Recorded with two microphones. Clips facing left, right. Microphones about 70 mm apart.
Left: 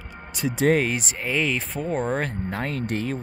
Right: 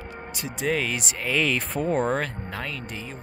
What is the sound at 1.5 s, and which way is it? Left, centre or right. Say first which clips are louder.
Speech: right 1 dB; centre.